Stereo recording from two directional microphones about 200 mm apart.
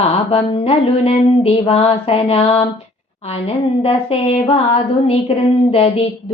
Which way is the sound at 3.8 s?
30° left (ahead or behind).